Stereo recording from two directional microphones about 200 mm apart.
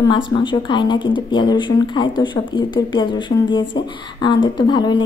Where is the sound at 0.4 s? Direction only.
25° left (ahead or behind).